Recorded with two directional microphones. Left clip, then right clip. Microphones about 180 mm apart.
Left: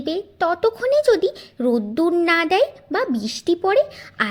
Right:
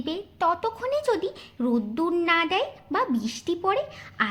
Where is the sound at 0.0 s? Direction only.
25° left (ahead or behind).